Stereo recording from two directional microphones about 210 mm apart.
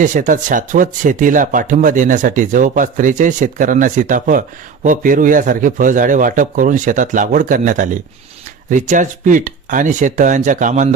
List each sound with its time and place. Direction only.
0.0 s speech: 40° right (ahead or behind)